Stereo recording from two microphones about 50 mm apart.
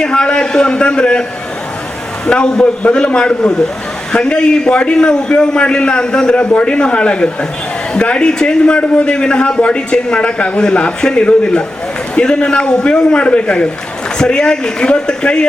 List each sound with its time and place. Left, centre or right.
0.0 s speech: centre
2.2 s a man's voice: centre